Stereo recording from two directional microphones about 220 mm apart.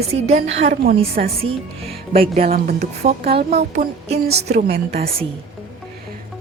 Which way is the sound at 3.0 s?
30° right (ahead or behind).